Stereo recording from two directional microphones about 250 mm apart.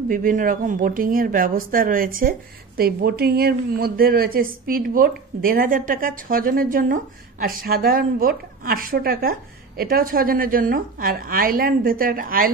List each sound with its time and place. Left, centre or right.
0.1 s speech: right